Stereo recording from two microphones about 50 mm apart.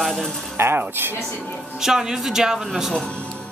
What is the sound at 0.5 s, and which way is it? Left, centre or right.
Speech, right.